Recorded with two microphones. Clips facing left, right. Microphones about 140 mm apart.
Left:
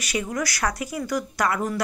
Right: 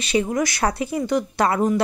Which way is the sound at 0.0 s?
25° right (ahead or behind).